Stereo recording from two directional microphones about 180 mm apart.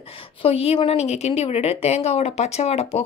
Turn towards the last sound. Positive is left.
turn(degrees=35)  # may be behind; listen again after turning